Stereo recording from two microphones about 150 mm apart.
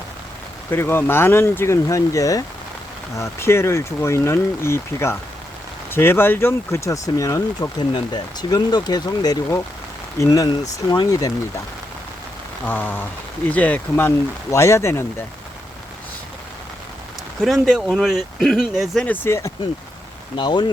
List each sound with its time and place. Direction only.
0.7 s speech: 15° left (ahead or behind)
12.6 s speech: 15° left (ahead or behind)
17.4 s speech: centre (ahead or behind)
19.0 s speech: 15° left (ahead or behind)
20.3 s speech: 30° left (ahead or behind)